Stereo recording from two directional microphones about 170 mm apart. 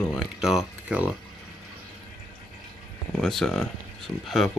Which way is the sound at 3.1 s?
Centre (ahead or behind).